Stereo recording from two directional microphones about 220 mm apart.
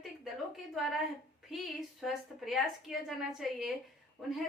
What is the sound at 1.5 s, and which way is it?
A woman's voice, centre (ahead or behind).